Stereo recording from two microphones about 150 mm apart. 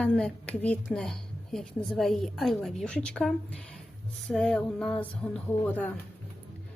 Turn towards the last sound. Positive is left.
turn(degrees=10)  # may be behind; listen again after turning